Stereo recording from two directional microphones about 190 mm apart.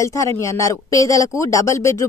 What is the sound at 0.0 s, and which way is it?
Speech, 15° left (ahead or behind).